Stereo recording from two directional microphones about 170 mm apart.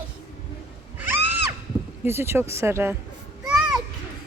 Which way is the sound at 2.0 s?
15° right (ahead or behind).